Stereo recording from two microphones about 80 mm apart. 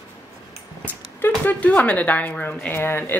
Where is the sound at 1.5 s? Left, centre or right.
Centre.